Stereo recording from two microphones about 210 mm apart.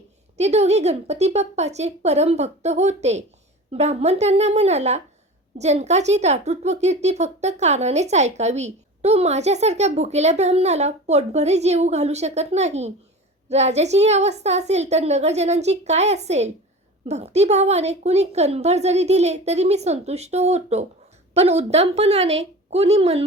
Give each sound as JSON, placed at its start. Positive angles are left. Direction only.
{"t": 0.3, "sound": "a woman's voice", "side_deg": -30}